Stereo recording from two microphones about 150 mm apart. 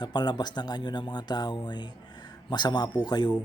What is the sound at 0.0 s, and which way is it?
Speech, 30° left (ahead or behind).